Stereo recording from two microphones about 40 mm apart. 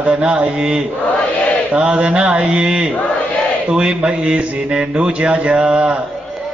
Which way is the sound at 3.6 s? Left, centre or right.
Right.